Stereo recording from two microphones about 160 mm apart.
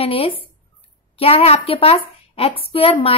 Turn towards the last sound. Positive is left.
turn(degrees=35)  # may be behind; listen again after turning